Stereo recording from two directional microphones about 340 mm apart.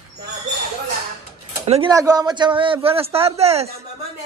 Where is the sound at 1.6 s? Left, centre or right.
Centre.